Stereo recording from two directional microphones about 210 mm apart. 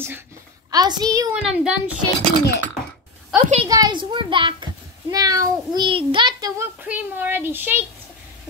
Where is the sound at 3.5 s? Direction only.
20° right (ahead or behind).